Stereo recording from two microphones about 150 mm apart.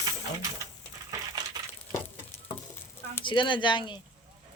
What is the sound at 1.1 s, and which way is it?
Crushing, 25° right (ahead or behind).